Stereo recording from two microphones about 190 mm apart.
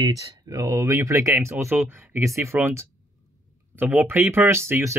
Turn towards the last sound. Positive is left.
turn(degrees=-15)  # may be behind; listen again after turning